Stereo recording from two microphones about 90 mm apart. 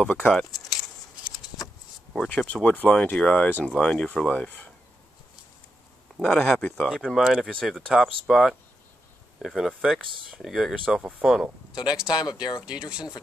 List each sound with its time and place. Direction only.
0.0 s speech: 10° left (ahead or behind)
2.1 s speech: 15° left (ahead or behind)
6.2 s speech: 5° left (ahead or behind)
6.9 s speech: 5° right (ahead or behind)
11.0 s speech: 15° right (ahead or behind)
12.1 s speech: 50° left (ahead or behind)